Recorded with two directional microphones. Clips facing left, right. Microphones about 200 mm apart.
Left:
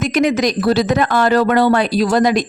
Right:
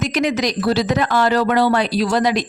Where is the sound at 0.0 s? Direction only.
50° left (ahead or behind).